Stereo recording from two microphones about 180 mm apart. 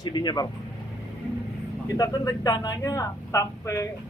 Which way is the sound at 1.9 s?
20° left (ahead or behind).